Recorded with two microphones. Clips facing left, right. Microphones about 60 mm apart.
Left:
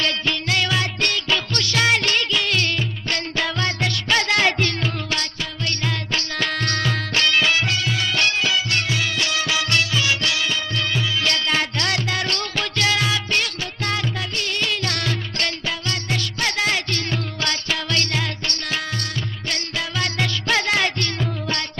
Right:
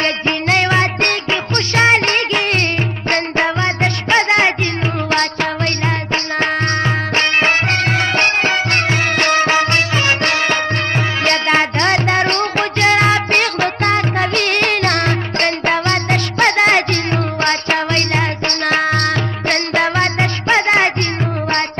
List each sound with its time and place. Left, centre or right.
0.0 s music: right
5.1 s music: right
6.1 s music: right
20.2 s music: right